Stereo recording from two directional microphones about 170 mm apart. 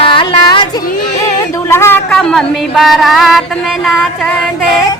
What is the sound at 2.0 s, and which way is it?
Music, 5° left (ahead or behind).